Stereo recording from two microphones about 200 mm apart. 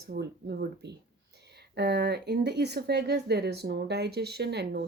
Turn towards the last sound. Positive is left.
turn(degrees=-55)  # may be behind; listen again after turning